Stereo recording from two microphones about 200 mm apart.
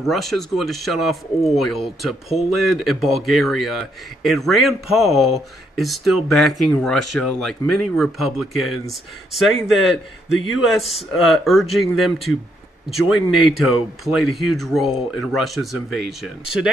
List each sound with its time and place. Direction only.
0.0 s speech: centre (ahead or behind)
10.3 s speech: 85° left
10.8 s speech: centre (ahead or behind)